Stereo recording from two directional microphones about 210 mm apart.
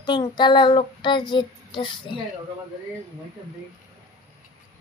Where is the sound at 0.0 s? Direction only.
20° left (ahead or behind).